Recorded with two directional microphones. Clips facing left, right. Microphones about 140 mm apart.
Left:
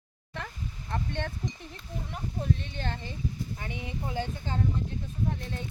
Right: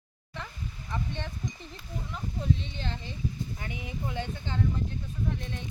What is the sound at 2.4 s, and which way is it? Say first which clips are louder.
Speech: even; 50° left (ahead or behind).